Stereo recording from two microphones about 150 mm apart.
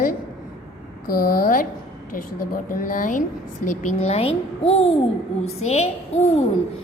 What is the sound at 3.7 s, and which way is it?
A child's voice, 50° left (ahead or behind).